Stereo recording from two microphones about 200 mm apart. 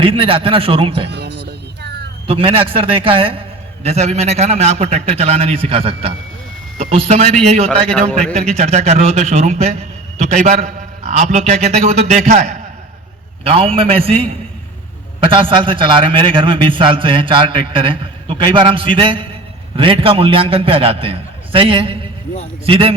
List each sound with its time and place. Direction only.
0.0 s a man's voice: 25° right (ahead or behind)
1.1 s music: 55° right (ahead or behind)
2.2 s a man's voice: 25° right (ahead or behind)
7.9 s a man's voice: 5° left (ahead or behind)
8.5 s a man's voice: 30° right (ahead or behind)